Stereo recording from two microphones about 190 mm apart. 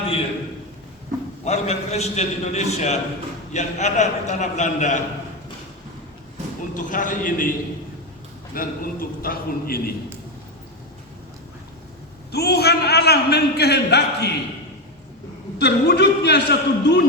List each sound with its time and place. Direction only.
1.5 s a man's voice: 35° left (ahead or behind)
6.7 s a man's voice: 45° left (ahead or behind)
8.5 s a man's voice: 50° left (ahead or behind)
12.3 s a man's voice: 55° left (ahead or behind)
15.5 s a man's voice: 60° left (ahead or behind)